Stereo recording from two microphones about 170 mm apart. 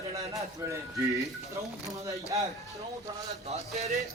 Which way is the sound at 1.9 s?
20° right (ahead or behind).